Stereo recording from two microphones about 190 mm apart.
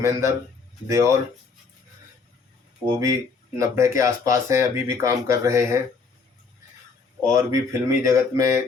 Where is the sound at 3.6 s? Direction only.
15° right (ahead or behind).